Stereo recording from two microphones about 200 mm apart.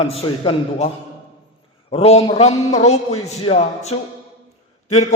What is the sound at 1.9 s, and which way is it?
Speech, 30° left (ahead or behind).